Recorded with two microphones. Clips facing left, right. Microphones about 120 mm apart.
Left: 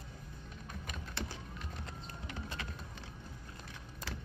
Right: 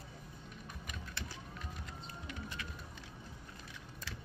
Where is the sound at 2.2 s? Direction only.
30° left (ahead or behind).